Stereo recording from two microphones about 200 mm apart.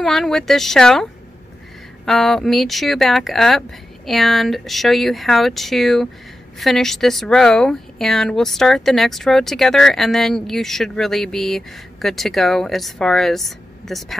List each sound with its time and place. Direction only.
0.0 s speech: centre (ahead or behind)
2.0 s speech: centre (ahead or behind)